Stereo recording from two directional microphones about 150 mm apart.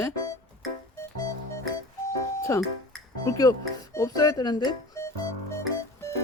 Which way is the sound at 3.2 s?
25° left (ahead or behind).